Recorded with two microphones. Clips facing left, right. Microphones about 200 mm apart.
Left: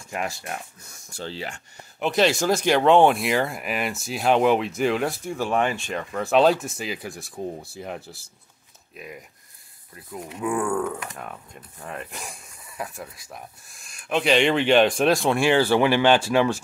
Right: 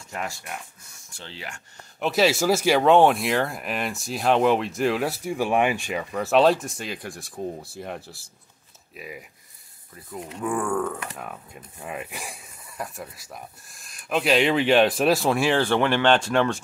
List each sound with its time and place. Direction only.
1.1 s speech: 35° left (ahead or behind)
2.0 s speech: 5° right (ahead or behind)